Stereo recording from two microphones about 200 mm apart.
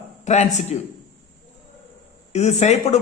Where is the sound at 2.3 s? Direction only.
35° left (ahead or behind).